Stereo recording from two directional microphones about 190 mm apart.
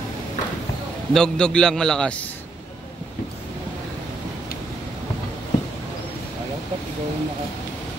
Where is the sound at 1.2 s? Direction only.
5° left (ahead or behind).